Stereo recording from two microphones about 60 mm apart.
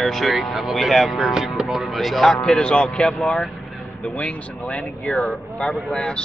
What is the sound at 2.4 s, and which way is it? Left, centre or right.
Speech, centre.